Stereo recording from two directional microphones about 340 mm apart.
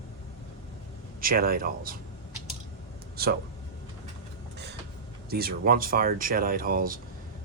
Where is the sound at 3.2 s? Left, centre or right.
Right.